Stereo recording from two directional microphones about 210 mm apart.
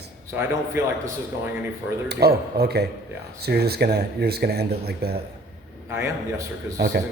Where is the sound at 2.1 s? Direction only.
50° right (ahead or behind).